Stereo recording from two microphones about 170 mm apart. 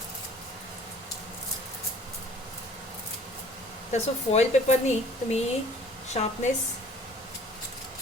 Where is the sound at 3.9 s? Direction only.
40° left (ahead or behind).